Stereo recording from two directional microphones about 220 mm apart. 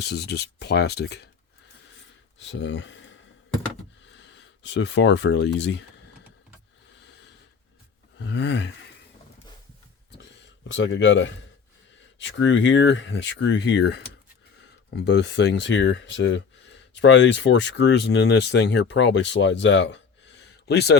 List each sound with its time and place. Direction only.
0.0 s speech: 50° left (ahead or behind)
2.4 s speech: 55° left (ahead or behind)
4.2 s speech: 55° left (ahead or behind)
7.0 s a sound: 50° left (ahead or behind)
8.2 s speech: 50° left (ahead or behind)
10.2 s speech: 55° left (ahead or behind)